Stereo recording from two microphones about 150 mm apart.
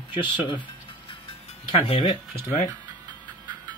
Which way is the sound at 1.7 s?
35° left (ahead or behind).